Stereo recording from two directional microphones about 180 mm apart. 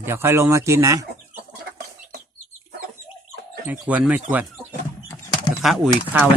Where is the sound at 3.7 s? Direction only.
10° right (ahead or behind).